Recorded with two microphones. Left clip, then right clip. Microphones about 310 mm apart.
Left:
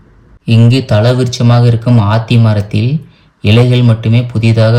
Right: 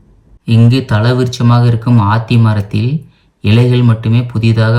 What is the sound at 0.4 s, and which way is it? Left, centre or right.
Speech, centre.